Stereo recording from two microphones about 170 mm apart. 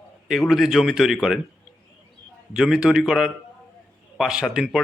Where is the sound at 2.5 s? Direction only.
5° right (ahead or behind).